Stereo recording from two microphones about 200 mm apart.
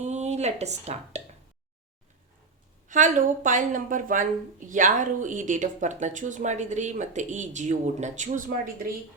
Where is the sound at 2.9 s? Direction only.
40° right (ahead or behind).